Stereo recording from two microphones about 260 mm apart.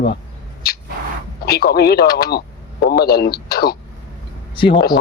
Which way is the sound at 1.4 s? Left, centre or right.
Left.